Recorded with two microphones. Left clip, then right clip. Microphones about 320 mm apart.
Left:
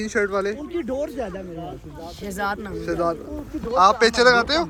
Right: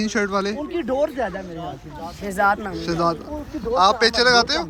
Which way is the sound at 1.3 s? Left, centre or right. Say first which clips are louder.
Right 2 dB; right.